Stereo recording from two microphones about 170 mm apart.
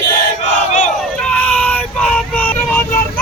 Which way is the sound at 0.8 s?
5° left (ahead or behind).